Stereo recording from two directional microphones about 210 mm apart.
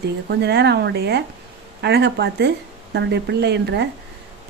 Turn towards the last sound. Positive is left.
turn(degrees=-55)  # may be behind; listen again after turning